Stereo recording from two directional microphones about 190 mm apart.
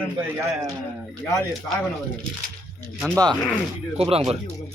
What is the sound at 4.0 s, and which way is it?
Speech, 30° right (ahead or behind).